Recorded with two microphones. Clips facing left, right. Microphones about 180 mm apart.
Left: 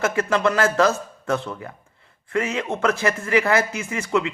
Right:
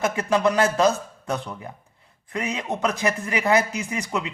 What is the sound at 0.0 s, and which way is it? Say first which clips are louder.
A man's voice: left 1 dB; 15° right (ahead or behind).